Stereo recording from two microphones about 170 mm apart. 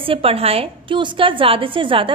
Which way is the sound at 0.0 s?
35° right (ahead or behind).